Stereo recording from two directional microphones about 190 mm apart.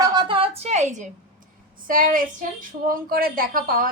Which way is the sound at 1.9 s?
45° right (ahead or behind).